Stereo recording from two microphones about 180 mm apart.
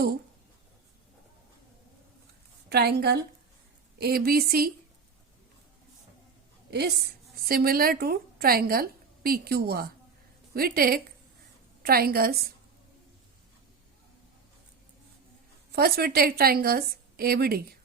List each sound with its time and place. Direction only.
2.6 s a woman's voice: 65° right (ahead or behind)
6.7 s a woman's voice: 65° right (ahead or behind)
15.7 s a woman's voice: 60° right (ahead or behind)